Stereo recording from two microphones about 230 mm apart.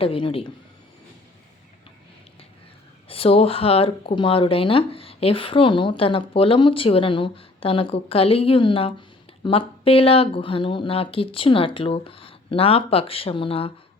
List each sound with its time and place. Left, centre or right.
0.0 s speech: left
3.1 s speech: left